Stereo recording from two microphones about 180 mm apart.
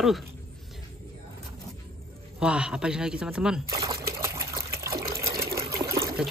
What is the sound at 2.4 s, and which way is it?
Speech, 5° right (ahead or behind).